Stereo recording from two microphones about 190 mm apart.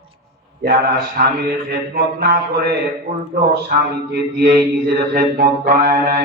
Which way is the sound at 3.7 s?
55° right (ahead or behind).